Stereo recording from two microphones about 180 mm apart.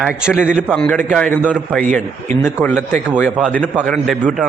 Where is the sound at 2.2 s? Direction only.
10° left (ahead or behind).